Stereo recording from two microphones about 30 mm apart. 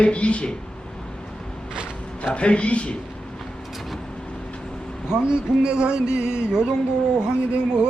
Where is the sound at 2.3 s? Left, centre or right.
Left.